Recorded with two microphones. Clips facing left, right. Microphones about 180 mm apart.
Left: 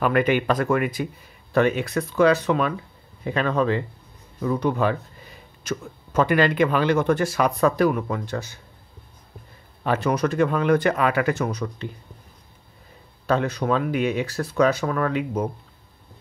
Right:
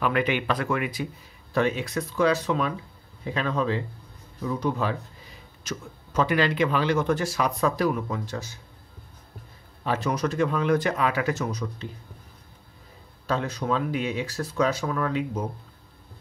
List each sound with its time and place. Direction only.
0.0 s speech: 45° left (ahead or behind)
9.8 s speech: 60° left (ahead or behind)
13.3 s speech: 65° left (ahead or behind)